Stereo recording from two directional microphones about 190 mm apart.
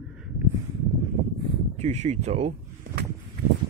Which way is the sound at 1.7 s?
35° right (ahead or behind).